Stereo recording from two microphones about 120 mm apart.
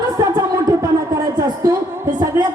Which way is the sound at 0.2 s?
25° right (ahead or behind).